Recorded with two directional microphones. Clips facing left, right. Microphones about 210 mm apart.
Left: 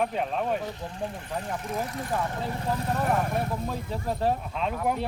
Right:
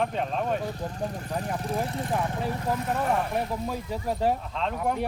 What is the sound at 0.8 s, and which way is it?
Speech, 40° right (ahead or behind).